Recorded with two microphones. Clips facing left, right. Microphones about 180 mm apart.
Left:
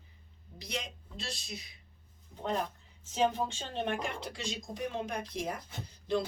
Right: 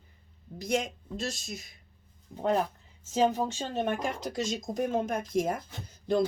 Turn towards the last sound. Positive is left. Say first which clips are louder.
# right 4 dB
turn(degrees=-45)  # may be behind; listen again after turning